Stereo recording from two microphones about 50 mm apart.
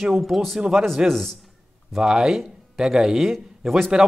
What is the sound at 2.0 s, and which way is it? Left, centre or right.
Speech, centre.